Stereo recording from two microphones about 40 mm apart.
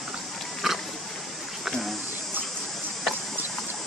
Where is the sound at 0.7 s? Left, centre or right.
Centre.